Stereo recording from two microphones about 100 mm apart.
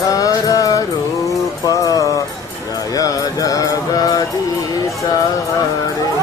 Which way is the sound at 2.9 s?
35° left (ahead or behind).